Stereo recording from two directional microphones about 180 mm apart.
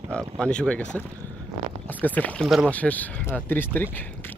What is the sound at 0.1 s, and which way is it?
Speech, 5° left (ahead or behind).